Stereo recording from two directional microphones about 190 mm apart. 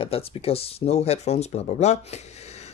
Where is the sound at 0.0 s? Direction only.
30° left (ahead or behind).